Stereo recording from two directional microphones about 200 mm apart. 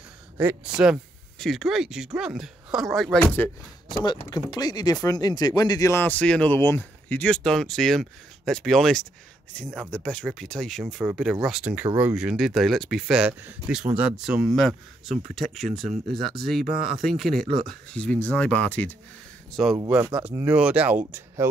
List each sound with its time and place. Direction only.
0.4 s speech: 5° right (ahead or behind)
3.9 s speech: 20° left (ahead or behind); by 21.0 s 5° right (ahead or behind)